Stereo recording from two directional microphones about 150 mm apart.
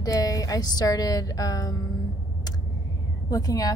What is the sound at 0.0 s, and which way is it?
Speech, 25° left (ahead or behind).